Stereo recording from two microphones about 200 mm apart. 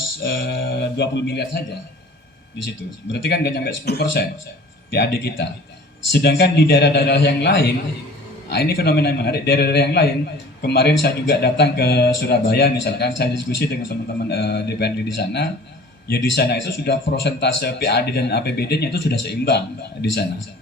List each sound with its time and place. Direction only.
0.2 s speech: 65° left (ahead or behind)
2.6 s a man's voice: 60° left (ahead or behind)